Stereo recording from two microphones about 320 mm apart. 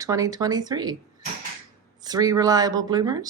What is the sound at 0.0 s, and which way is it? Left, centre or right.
Speech, centre.